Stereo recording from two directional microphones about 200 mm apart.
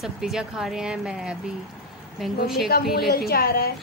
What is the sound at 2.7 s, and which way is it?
Speech, 50° left (ahead or behind).